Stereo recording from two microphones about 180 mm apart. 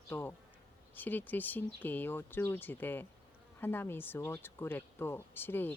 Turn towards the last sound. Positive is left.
turn(degrees=10)  # may be behind; listen again after turning